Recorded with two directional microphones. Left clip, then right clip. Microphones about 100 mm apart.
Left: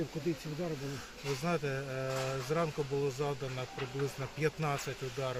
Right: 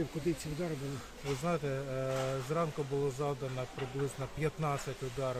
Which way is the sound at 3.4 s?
Centre (ahead or behind).